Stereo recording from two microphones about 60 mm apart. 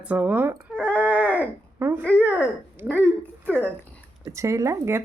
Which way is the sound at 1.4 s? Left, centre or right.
Right.